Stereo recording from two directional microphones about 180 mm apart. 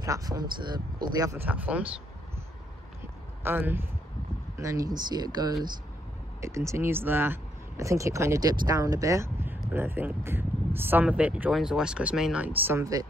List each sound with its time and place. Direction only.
0.0 s speech: 20° right (ahead or behind)
3.4 s speech: 10° right (ahead or behind)